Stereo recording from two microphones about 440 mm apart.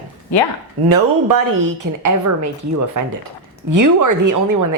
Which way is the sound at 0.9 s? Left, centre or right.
Right.